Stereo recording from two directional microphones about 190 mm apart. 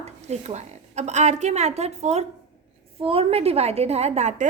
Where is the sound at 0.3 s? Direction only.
35° right (ahead or behind).